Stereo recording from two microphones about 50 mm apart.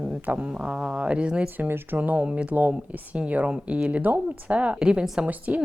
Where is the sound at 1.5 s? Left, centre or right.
Right.